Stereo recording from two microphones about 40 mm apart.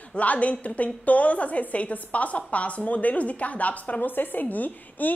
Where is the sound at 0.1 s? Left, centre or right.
Left.